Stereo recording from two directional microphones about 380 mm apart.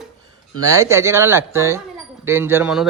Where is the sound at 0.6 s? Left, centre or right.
Centre.